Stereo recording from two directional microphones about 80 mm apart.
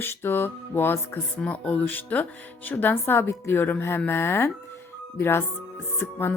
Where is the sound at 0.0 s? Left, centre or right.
Left.